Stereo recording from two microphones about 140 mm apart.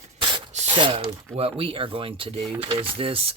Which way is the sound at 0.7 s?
35° right (ahead or behind).